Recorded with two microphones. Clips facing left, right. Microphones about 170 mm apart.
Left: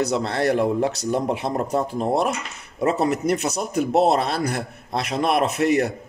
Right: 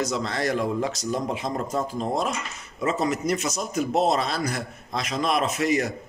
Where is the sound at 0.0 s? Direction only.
65° left (ahead or behind).